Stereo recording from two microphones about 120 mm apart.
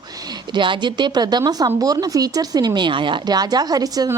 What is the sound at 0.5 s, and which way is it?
A woman's voice, 40° right (ahead or behind).